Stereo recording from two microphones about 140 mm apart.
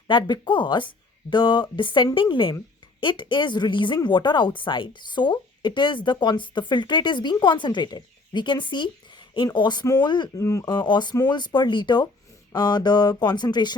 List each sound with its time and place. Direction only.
0.1 s speech: 35° left (ahead or behind)